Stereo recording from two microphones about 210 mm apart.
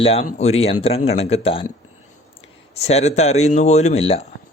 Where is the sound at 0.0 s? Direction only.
30° left (ahead or behind).